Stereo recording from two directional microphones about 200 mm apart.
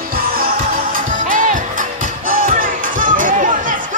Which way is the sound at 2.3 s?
40° right (ahead or behind).